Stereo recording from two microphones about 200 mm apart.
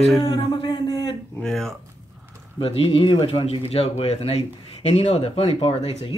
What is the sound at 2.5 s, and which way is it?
Speech, 30° left (ahead or behind).